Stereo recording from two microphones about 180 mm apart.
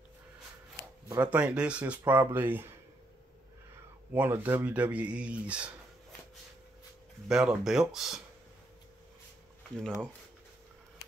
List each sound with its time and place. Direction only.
1.0 s speech: 10° right (ahead or behind)
4.1 s speech: 10° right (ahead or behind)
7.2 s speech: 5° right (ahead or behind)
9.6 s speech: 5° left (ahead or behind)